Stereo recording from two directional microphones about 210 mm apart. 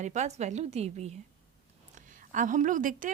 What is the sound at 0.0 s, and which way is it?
A woman's voice, 35° right (ahead or behind).